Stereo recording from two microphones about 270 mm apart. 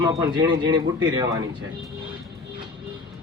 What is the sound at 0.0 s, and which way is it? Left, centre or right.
Speech, centre.